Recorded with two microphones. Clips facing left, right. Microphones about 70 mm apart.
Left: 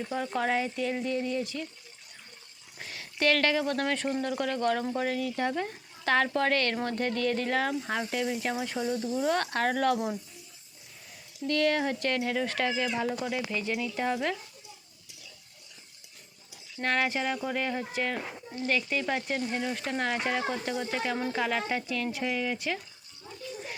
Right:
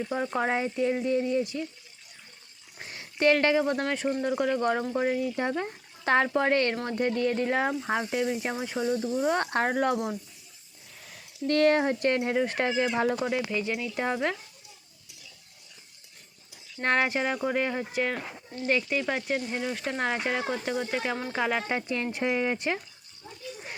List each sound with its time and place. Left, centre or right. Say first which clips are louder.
0.1 s speech: even; centre
2.8 s speech: right 4 dB; right
11.4 s speech: right 4 dB; right
13.5 s speech: right 1 dB; centre
16.8 s speech: right 3 dB; right
21.8 s speech: right 2 dB; right